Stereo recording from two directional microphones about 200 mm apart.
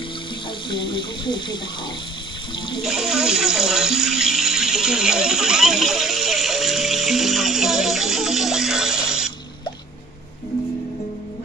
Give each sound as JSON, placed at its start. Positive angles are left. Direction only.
{"t": 0.7, "sound": "speech", "side_deg": 25}
{"t": 2.8, "sound": "water", "side_deg": -5}